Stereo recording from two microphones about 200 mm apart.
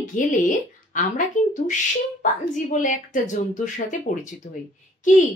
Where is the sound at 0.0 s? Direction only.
40° left (ahead or behind).